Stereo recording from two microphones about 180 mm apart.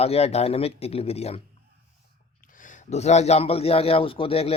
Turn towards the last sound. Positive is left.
turn(degrees=30)  # may be behind; listen again after turning